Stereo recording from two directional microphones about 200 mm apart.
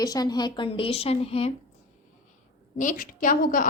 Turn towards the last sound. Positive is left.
turn(degrees=40)  # may be behind; listen again after turning